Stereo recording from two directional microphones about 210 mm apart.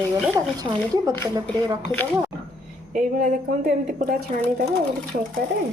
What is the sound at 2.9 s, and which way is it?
A woman's voice, 35° right (ahead or behind).